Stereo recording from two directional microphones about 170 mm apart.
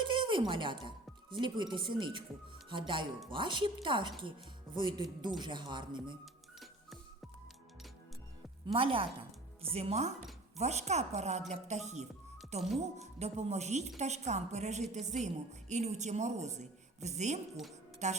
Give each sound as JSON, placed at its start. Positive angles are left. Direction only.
{"t": 0.0, "sound": "speech", "side_deg": -30}
{"t": 8.6, "sound": "a woman's voice", "side_deg": -30}